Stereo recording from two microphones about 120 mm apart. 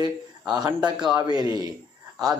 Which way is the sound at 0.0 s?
35° right (ahead or behind).